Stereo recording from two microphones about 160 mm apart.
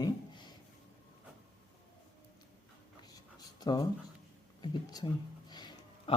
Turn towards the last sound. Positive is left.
turn(degrees=25)  # may be behind; listen again after turning